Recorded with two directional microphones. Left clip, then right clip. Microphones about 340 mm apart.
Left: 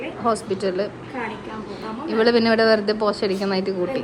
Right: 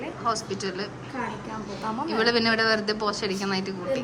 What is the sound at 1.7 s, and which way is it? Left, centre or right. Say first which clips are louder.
A woman's voice: left 3 dB; centre.